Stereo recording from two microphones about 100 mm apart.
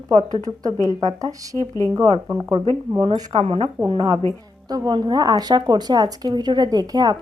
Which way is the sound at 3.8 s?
50° right (ahead or behind).